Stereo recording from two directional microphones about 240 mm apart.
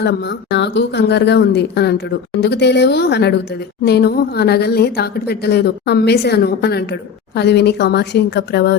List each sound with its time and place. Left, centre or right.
0.0 s a woman's voice: left